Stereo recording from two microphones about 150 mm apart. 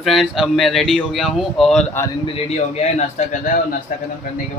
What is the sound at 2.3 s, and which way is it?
Speech, 45° left (ahead or behind).